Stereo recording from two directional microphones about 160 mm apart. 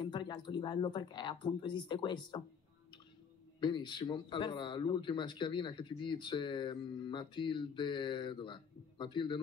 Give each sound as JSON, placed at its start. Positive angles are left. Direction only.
{"t": 0.0, "sound": "speech", "side_deg": 25}
{"t": 3.6, "sound": "speech", "side_deg": 30}